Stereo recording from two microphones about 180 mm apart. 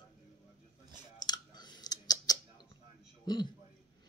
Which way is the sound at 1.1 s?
25° left (ahead or behind).